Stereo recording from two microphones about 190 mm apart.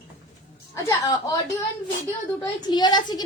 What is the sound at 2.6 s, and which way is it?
Speech, 20° left (ahead or behind).